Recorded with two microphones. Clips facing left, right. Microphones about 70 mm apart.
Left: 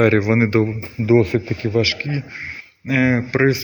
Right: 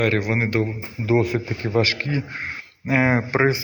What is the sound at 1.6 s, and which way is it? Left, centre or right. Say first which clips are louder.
Speech: right 2 dB; right.